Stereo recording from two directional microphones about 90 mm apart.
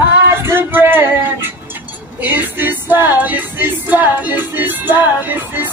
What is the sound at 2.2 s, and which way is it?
Music, 20° right (ahead or behind).